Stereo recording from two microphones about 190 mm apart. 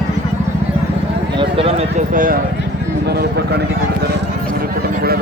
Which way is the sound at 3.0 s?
60° right (ahead or behind).